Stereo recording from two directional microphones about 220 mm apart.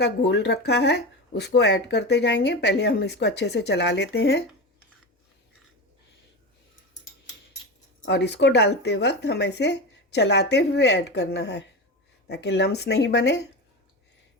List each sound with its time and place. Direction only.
0.0 s speech: 50° left (ahead or behind)
8.0 s speech: 50° left (ahead or behind)